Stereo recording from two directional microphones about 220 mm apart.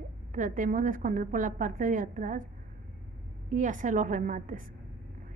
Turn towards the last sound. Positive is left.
turn(degrees=-35)  # may be behind; listen again after turning